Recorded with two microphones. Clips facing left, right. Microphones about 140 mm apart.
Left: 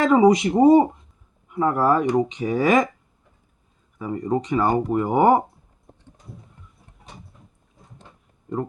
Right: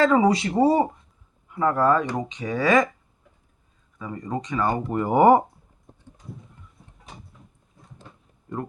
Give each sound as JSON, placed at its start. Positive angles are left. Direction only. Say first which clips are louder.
{"t": 0.0, "sound": "speech", "louder": "left 3 dB", "side_deg": 20}
{"t": 3.9, "sound": "speech", "louder": "left 6 dB", "side_deg": 25}
{"t": 4.9, "sound": "speech", "louder": "right 3 dB", "side_deg": 5}